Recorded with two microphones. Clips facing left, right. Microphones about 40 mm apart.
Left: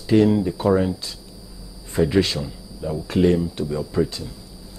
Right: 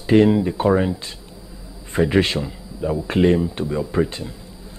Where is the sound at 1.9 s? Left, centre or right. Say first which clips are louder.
Right 1 dB; right.